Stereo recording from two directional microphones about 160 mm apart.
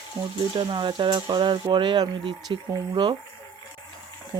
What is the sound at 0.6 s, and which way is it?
Speech, 30° right (ahead or behind).